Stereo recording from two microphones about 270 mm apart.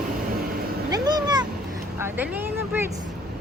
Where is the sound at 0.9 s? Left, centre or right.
Centre.